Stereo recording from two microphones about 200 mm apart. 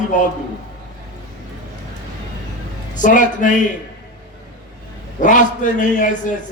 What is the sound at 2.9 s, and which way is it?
Speech, 40° left (ahead or behind).